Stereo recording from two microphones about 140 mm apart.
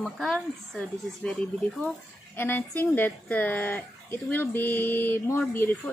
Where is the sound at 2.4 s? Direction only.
15° left (ahead or behind).